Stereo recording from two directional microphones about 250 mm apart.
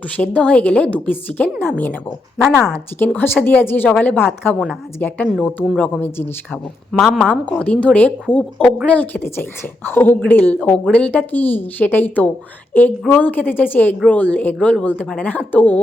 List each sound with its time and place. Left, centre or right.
0.2 s a woman's voice: centre